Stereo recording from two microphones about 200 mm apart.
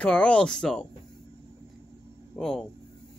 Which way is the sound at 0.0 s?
5° left (ahead or behind).